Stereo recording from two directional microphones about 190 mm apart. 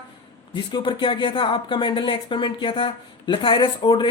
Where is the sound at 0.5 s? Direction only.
25° left (ahead or behind).